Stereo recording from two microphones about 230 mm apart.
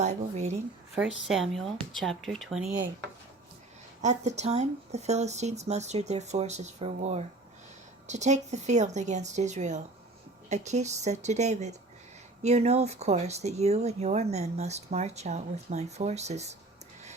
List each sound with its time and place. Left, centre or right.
0.0 s speech: right
0.9 s speech: centre
4.0 s speech: right